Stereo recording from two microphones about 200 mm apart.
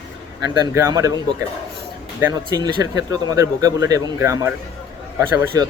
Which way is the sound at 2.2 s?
20° right (ahead or behind).